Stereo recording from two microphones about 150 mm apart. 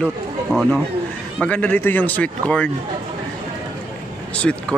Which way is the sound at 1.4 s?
10° left (ahead or behind).